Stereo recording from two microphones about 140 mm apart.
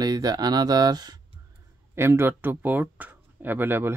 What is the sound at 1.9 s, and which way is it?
Speech, 15° right (ahead or behind).